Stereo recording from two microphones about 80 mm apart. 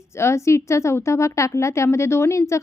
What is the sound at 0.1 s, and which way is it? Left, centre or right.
A woman's voice, left.